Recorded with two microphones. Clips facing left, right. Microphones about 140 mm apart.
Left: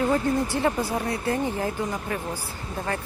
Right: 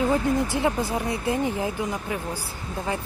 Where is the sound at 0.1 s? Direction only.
15° right (ahead or behind).